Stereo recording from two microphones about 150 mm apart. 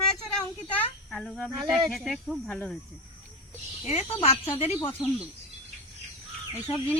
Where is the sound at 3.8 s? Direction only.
45° left (ahead or behind).